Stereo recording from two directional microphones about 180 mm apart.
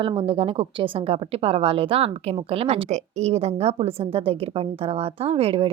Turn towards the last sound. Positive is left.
turn(degrees=-35)  # may be behind; listen again after turning